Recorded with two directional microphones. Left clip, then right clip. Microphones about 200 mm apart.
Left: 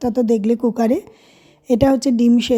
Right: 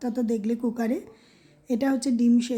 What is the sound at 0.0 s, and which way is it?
Speech, 35° left (ahead or behind).